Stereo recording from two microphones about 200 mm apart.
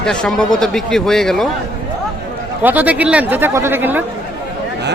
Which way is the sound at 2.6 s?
10° right (ahead or behind).